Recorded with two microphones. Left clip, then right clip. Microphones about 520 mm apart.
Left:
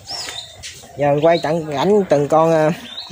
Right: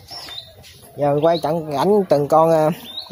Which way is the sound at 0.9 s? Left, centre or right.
Right.